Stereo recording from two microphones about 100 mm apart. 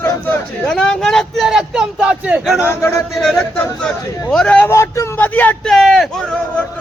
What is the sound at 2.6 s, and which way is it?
Speech, 25° left (ahead or behind).